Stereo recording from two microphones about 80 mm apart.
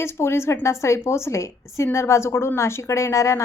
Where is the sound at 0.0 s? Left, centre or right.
Left.